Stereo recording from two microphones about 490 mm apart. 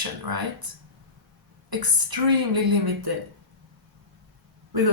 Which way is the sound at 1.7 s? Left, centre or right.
Right.